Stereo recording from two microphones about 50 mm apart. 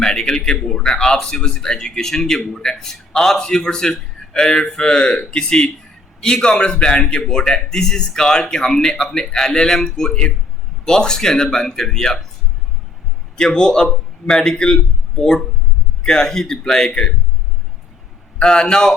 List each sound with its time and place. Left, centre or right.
0.0 s a man's voice: centre
13.3 s speech: centre
16.0 s speech: centre
18.3 s speech: centre